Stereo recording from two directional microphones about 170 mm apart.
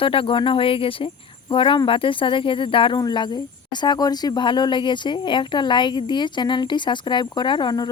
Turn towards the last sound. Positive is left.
turn(degrees=25)  # may be behind; listen again after turning